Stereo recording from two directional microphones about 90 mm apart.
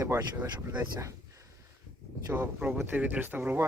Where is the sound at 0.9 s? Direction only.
35° right (ahead or behind).